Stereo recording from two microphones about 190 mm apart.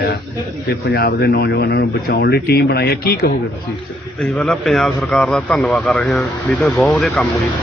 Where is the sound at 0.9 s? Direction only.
55° left (ahead or behind).